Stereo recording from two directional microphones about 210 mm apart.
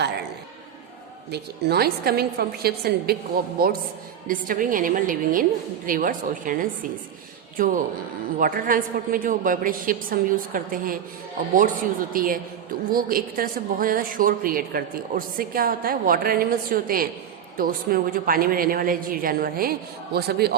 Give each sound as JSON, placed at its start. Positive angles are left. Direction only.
{"t": 1.3, "sound": "a woman's voice", "side_deg": -50}